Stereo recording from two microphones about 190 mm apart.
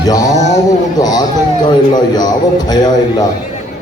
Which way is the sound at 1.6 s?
20° left (ahead or behind).